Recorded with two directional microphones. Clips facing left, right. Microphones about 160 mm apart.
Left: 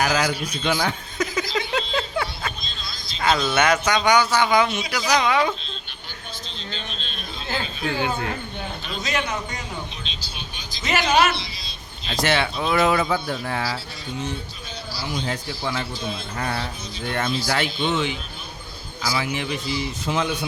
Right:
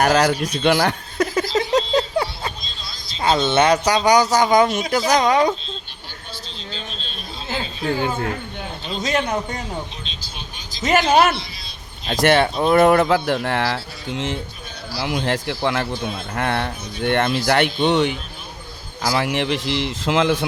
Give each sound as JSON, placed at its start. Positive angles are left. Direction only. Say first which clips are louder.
{"t": 0.2, "sound": "speech", "louder": "right 6 dB", "side_deg": -40}
{"t": 0.5, "sound": "speech", "louder": "right 6 dB", "side_deg": -75}
{"t": 1.5, "sound": "a sound", "louder": "right 7 dB", "side_deg": -40}
{"t": 3.2, "sound": "speech", "louder": "right 4 dB", "side_deg": -25}
{"t": 6.7, "sound": "a sound", "louder": "right 2 dB", "side_deg": -35}
{"t": 7.6, "sound": "a man's voice", "louder": "right 4 dB", "side_deg": -35}
{"t": 13.1, "sound": "a man's voice", "louder": "right 6 dB", "side_deg": -80}